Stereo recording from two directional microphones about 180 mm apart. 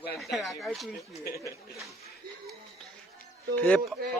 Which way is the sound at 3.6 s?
5° left (ahead or behind).